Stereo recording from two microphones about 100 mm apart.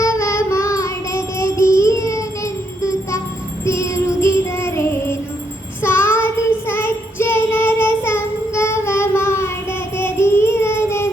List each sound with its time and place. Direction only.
0.0 s child singing: 30° left (ahead or behind)
3.7 s music: 30° left (ahead or behind)
5.8 s child singing: 25° left (ahead or behind)